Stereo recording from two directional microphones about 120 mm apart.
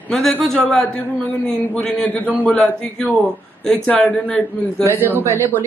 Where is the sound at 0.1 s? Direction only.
5° left (ahead or behind).